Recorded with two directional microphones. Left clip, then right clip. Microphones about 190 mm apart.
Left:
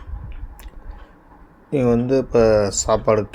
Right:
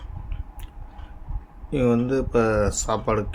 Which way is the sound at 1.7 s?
15° left (ahead or behind).